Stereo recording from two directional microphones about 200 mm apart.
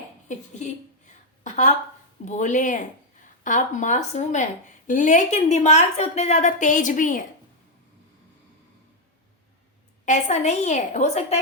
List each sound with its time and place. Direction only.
0.3 s a sound: 35° left (ahead or behind)
2.2 s a woman's voice: 40° left (ahead or behind)
10.1 s a woman's voice: 35° left (ahead or behind)